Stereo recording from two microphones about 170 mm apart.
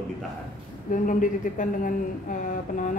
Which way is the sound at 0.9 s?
50° left (ahead or behind).